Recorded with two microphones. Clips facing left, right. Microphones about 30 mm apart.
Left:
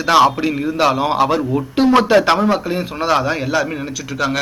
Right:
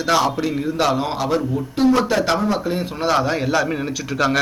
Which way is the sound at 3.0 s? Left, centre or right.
Centre.